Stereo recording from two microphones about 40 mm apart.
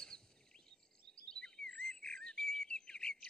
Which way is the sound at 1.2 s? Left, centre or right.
Centre.